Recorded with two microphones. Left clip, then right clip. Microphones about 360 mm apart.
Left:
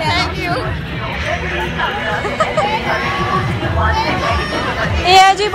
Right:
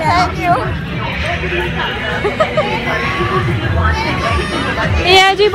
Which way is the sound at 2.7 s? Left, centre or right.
Left.